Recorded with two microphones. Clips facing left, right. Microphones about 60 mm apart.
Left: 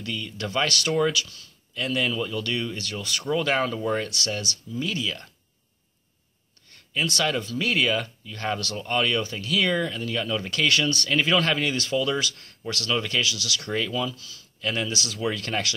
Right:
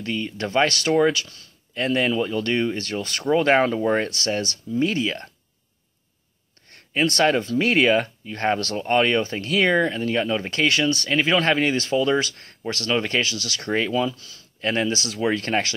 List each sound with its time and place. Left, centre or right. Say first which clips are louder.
0.0 s speech: right 5 dB; right
6.7 s speech: right 5 dB; right; by 11.4 s centre
11.6 s speech: right 4 dB; right